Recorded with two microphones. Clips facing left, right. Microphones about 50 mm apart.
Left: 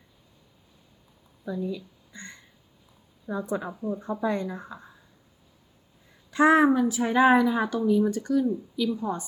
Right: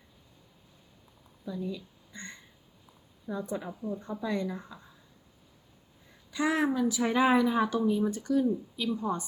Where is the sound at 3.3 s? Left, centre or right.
Left.